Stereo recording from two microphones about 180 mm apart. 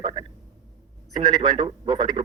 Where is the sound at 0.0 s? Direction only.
25° right (ahead or behind).